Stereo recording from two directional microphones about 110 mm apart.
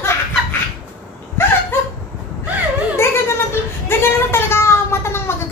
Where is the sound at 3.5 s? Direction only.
20° left (ahead or behind).